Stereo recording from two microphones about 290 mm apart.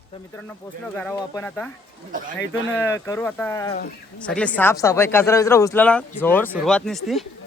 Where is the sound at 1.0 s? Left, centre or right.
Centre.